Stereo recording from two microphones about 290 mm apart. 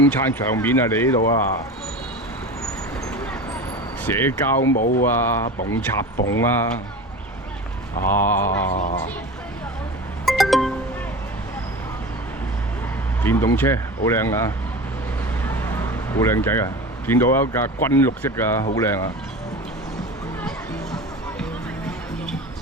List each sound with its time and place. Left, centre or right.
0.0 s speech: centre
4.0 s speech: centre
4.6 s speech: left
5.0 s speech: centre
5.6 s speech: left
6.3 s speech: centre
8.0 s speech: centre
8.7 s speech: left
10.2 s music: centre
13.2 s speech: centre